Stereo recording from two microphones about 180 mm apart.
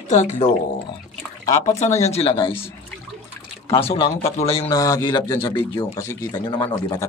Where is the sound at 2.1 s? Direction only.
30° left (ahead or behind).